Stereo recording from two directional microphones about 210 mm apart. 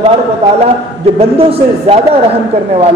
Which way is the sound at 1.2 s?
25° right (ahead or behind).